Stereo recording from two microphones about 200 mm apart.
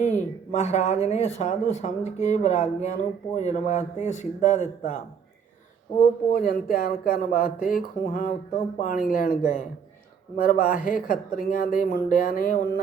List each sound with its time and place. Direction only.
0.0 s speech: 35° left (ahead or behind)
6.3 s speech: 45° left (ahead or behind)